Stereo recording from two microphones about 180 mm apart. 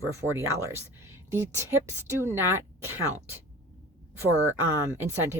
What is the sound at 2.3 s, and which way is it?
Speech, 15° right (ahead or behind).